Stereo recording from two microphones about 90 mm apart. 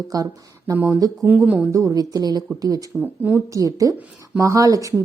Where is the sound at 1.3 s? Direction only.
20° right (ahead or behind).